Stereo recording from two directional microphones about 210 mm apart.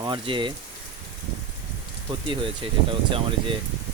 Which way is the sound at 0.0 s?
20° right (ahead or behind).